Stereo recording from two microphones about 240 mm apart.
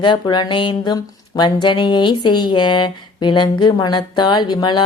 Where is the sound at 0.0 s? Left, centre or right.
Centre.